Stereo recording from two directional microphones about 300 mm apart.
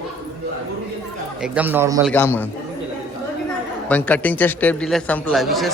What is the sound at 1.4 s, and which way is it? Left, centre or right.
Speech, centre.